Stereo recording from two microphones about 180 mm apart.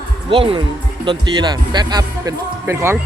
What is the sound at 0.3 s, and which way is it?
Speech, 30° right (ahead or behind).